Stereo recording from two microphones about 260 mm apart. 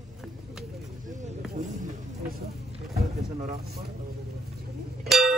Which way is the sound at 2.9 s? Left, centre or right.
Right.